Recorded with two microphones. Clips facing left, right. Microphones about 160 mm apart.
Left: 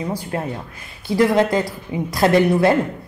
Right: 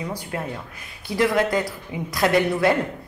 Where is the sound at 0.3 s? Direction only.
35° left (ahead or behind).